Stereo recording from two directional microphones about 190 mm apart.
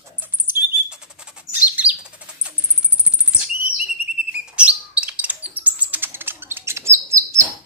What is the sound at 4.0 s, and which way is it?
Bird, 5° right (ahead or behind).